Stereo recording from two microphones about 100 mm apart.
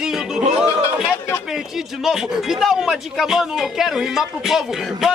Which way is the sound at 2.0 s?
5° right (ahead or behind).